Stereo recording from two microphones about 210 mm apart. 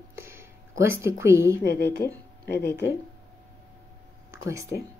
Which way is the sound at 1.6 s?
50° left (ahead or behind).